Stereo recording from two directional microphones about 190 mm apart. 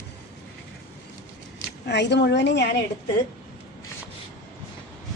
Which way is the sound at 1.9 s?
65° left (ahead or behind).